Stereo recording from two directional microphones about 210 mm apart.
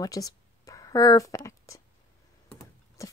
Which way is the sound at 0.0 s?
15° left (ahead or behind).